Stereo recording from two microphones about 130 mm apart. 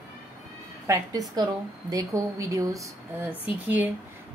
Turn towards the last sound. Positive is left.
turn(degrees=-15)  # may be behind; listen again after turning